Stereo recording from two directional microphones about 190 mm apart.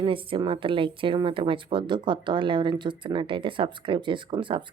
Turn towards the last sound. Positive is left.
turn(degrees=-25)  # may be behind; listen again after turning